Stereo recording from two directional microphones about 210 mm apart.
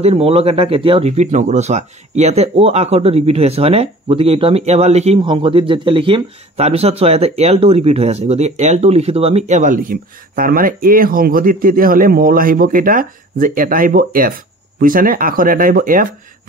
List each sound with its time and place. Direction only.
0.0 s speech: 30° right (ahead or behind)